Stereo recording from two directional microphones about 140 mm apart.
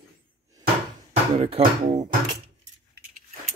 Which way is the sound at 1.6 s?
45° right (ahead or behind).